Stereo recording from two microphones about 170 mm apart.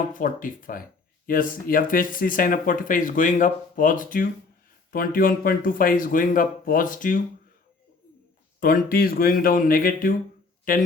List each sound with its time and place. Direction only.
0.1 s speech: 55° left (ahead or behind)
8.6 s speech: 55° left (ahead or behind)